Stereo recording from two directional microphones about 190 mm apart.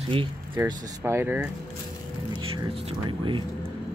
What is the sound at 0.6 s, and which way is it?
Speech, 15° right (ahead or behind).